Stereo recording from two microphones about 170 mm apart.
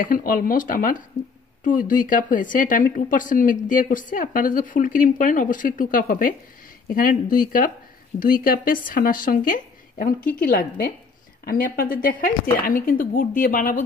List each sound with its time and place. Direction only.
0.0 s speech: 55° left (ahead or behind)